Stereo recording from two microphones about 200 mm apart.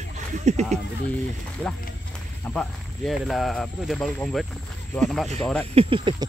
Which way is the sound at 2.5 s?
5° left (ahead or behind).